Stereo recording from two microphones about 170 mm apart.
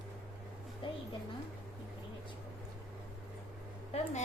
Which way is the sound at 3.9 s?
35° left (ahead or behind).